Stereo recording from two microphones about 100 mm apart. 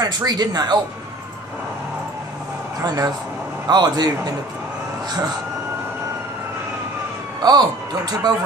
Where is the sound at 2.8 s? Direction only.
40° right (ahead or behind).